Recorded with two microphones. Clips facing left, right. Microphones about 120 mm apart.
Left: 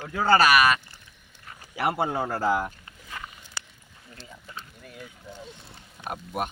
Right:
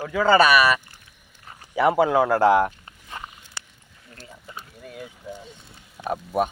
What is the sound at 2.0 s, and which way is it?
Speech, 90° right.